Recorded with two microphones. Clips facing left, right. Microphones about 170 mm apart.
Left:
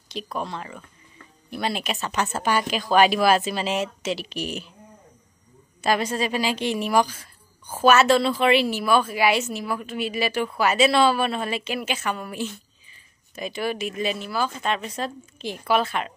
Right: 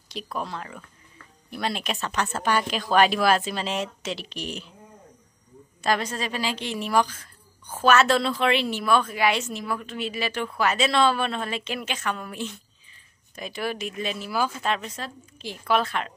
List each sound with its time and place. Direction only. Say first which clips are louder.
0.1 s a woman's voice: left 2 dB; centre (ahead or behind)
5.8 s a woman's voice: left 3 dB; 10° left (ahead or behind)
14.2 s a woman's voice: even; 10° right (ahead or behind)
15.0 s a woman's voice: left 7 dB; 20° left (ahead or behind)
15.6 s a woman's voice: left 1 dB; 5° left (ahead or behind)